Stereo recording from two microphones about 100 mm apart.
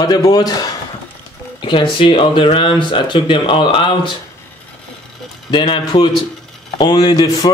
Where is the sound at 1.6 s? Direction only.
55° left (ahead or behind).